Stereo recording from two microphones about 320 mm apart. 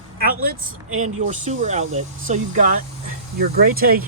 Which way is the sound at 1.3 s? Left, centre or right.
Right.